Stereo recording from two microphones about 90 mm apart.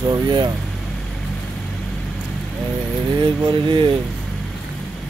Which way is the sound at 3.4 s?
60° right (ahead or behind).